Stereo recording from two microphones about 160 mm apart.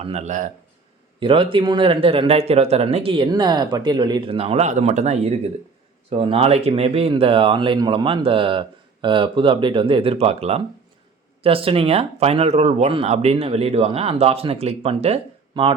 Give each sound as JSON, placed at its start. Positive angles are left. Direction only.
{"t": 0.0, "sound": "speech", "side_deg": -45}
{"t": 1.2, "sound": "speech", "side_deg": -35}